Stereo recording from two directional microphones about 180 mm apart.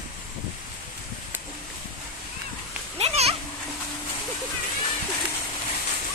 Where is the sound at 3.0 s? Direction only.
35° right (ahead or behind).